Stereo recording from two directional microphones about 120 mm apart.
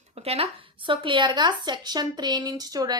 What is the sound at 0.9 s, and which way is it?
Speech, 45° right (ahead or behind).